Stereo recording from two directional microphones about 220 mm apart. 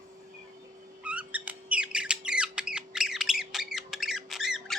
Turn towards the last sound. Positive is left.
turn(degrees=0)  # may be behind; listen again after turning